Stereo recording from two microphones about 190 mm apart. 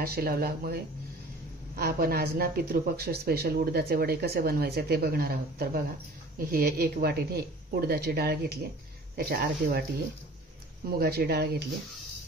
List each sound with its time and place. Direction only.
0.0 s speech: 55° right (ahead or behind)